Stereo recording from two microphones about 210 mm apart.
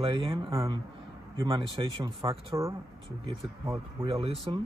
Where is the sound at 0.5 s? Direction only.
15° right (ahead or behind).